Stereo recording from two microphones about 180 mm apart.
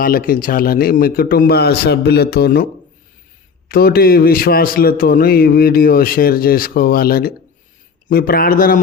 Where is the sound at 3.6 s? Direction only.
55° left (ahead or behind).